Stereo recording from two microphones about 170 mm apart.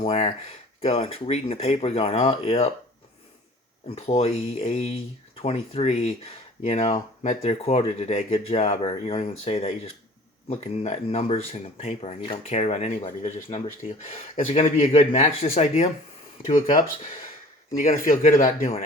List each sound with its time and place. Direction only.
0.0 s speech: 40° left (ahead or behind)
3.8 s speech: 35° left (ahead or behind)
17.7 s speech: 55° left (ahead or behind)